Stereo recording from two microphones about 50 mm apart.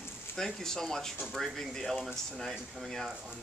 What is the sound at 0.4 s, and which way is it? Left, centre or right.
A man's voice, centre.